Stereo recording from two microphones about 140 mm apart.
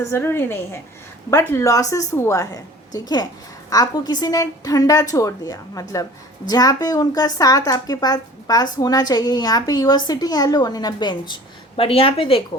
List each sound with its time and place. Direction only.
0.0 s a woman's voice: 20° left (ahead or behind)
11.8 s a woman's voice: 45° left (ahead or behind)